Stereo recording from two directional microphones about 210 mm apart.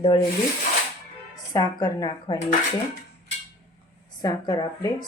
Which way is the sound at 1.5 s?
20° left (ahead or behind).